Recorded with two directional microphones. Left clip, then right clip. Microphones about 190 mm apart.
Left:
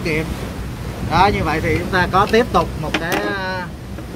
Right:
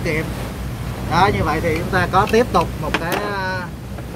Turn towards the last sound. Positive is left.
turn(degrees=10)  # may be behind; listen again after turning